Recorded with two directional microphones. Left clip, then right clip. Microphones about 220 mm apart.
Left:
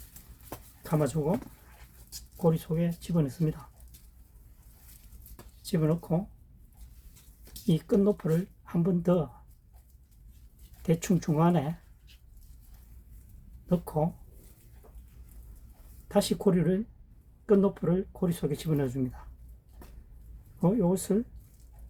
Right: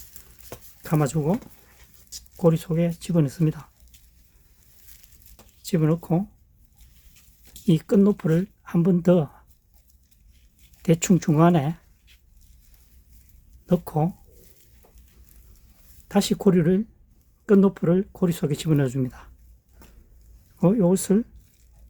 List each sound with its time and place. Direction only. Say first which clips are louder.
0.8 s speech: right 4 dB; 50° right (ahead or behind)
2.4 s speech: right 7 dB; 50° right (ahead or behind)
5.6 s speech: right 6 dB; 45° right (ahead or behind)
7.7 s speech: right 5 dB; 45° right (ahead or behind)
10.8 s speech: right 7 dB; 45° right (ahead or behind)
13.7 s speech: right 5 dB; 45° right (ahead or behind)
16.0 s speech: right 4 dB; 45° right (ahead or behind)
20.6 s speech: right 7 dB; 50° right (ahead or behind)